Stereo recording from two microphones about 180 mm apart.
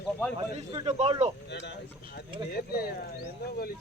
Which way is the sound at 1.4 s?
70° left (ahead or behind).